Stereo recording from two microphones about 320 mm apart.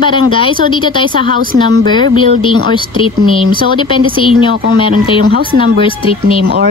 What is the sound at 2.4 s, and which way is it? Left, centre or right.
A woman's voice, centre.